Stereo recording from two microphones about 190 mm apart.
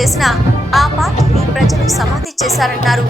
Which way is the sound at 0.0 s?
Centre (ahead or behind).